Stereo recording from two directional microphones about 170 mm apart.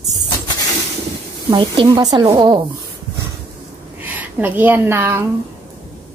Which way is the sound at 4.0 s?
10° right (ahead or behind).